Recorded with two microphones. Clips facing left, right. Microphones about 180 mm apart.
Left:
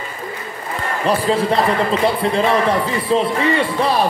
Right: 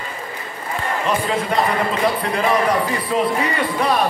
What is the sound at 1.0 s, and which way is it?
A man's voice, 30° left (ahead or behind).